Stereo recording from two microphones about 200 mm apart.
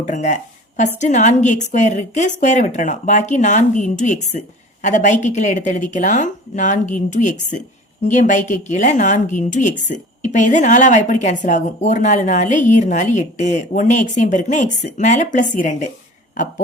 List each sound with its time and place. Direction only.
0.0 s a woman's voice: 35° left (ahead or behind)